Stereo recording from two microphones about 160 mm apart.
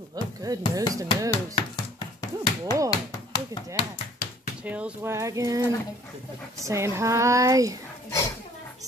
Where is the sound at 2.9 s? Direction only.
25° left (ahead or behind).